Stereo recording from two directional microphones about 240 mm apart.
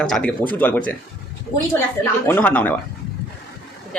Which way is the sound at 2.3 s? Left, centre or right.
Centre.